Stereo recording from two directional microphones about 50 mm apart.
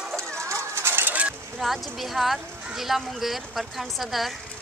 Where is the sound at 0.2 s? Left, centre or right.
Right.